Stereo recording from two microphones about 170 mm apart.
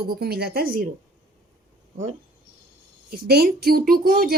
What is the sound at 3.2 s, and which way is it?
A woman's voice, 65° right (ahead or behind).